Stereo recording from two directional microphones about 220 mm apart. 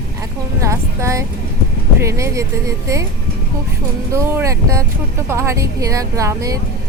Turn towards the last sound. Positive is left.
turn(degrees=-15)  # may be behind; listen again after turning